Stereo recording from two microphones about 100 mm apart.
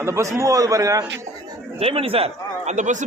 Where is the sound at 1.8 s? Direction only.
70° right (ahead or behind).